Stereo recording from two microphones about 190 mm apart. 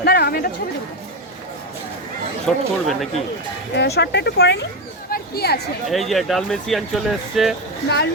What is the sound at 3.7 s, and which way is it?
Speech, 60° left (ahead or behind).